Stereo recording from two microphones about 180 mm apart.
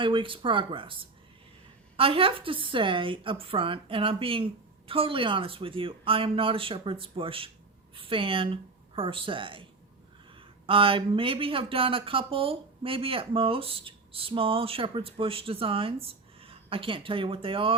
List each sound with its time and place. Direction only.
0.0 s speech: 30° right (ahead or behind)
2.0 s speech: 30° right (ahead or behind)
10.7 s speech: 30° right (ahead or behind)